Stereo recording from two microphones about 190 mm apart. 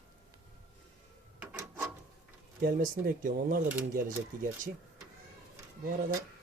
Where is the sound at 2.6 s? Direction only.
45° right (ahead or behind).